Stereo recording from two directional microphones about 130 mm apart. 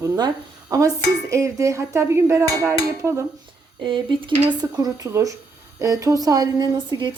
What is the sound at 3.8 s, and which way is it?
A woman's voice, 35° right (ahead or behind).